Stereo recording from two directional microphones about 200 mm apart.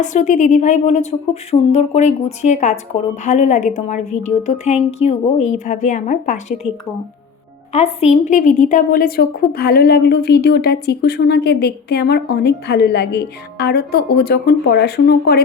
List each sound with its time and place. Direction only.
0.0 s a woman's voice: 35° left (ahead or behind)
7.7 s a woman's voice: 30° left (ahead or behind); by 15.4 s 55° left (ahead or behind)